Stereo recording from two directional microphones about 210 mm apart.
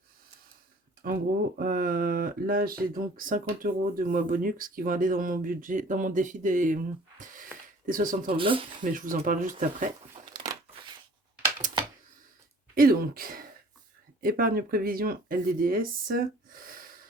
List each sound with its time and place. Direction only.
1.0 s speech: 45° right (ahead or behind)
7.9 s speech: 40° right (ahead or behind)
8.3 s speech: 25° right (ahead or behind)
8.8 s speech: 40° right (ahead or behind)
10.3 s crushing: 20° right (ahead or behind)
12.7 s speech: 45° right (ahead or behind)